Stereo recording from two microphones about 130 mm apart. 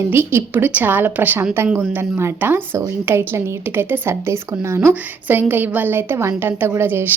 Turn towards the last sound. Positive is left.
turn(degrees=-15)  # may be behind; listen again after turning